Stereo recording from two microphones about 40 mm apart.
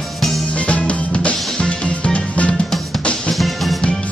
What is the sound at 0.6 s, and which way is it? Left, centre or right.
Music, left.